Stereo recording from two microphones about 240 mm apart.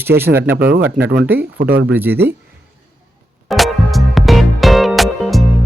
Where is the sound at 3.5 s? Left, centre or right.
Centre.